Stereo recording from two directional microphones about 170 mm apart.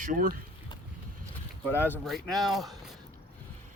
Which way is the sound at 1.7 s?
15° left (ahead or behind).